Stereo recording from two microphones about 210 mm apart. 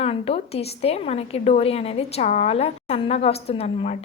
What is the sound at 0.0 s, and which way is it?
A woman's voice, 30° left (ahead or behind).